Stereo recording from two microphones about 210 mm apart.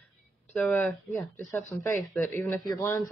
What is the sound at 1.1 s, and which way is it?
Speech, 10° left (ahead or behind).